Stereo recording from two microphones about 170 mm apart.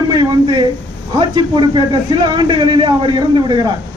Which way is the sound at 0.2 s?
25° right (ahead or behind).